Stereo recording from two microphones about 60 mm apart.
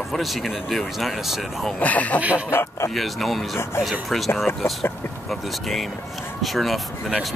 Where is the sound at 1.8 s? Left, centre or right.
Left.